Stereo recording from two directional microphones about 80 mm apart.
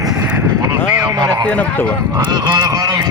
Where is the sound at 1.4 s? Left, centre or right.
Centre.